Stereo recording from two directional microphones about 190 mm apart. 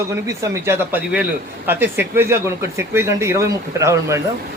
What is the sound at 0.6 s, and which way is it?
Speech, 10° right (ahead or behind).